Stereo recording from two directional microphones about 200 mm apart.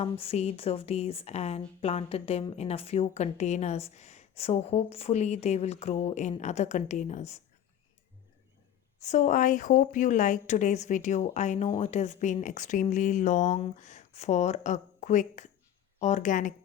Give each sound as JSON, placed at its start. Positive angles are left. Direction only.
{"t": 0.0, "sound": "speech", "side_deg": 30}
{"t": 9.0, "sound": "speech", "side_deg": 35}